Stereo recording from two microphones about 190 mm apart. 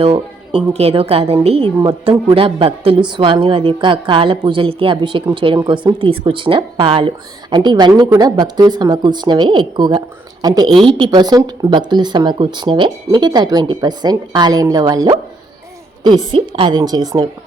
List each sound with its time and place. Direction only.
0.0 s a woman's voice: 30° right (ahead or behind)
16.3 s speech: 25° right (ahead or behind)